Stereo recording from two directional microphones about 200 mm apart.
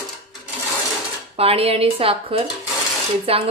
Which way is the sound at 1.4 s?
30° right (ahead or behind).